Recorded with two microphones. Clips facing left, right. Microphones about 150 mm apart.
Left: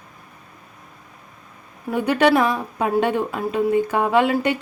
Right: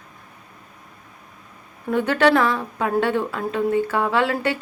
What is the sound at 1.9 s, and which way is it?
Speech, 15° left (ahead or behind).